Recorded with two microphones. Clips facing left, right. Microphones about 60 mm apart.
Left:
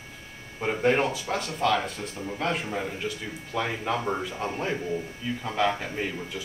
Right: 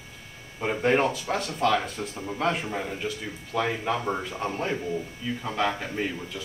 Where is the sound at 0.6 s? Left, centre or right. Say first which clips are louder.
Even; centre.